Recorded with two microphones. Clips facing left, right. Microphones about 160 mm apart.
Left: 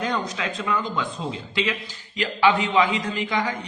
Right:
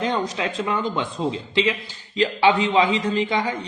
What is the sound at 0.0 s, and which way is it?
A man's voice, 25° right (ahead or behind).